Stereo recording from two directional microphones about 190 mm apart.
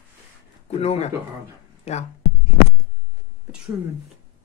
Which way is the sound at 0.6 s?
35° left (ahead or behind).